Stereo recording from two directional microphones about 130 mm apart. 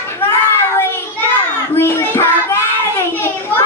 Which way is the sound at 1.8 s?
20° left (ahead or behind).